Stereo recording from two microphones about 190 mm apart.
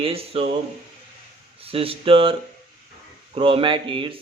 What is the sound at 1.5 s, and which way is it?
Speech, 30° right (ahead or behind).